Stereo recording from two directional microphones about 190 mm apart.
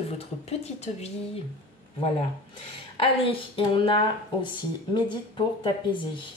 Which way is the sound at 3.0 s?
30° left (ahead or behind).